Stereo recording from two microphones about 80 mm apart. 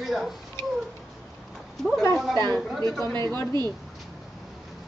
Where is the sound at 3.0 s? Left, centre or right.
Right.